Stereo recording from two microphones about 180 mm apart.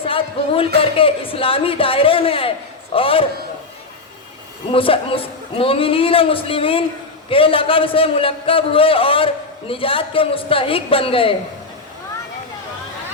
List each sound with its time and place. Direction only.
0.0 s music: 30° left (ahead or behind)
0.8 s a man's voice: 30° left (ahead or behind)
4.7 s a man's voice: 30° left (ahead or behind)